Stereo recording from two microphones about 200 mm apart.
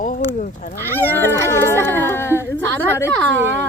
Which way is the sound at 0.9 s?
10° left (ahead or behind).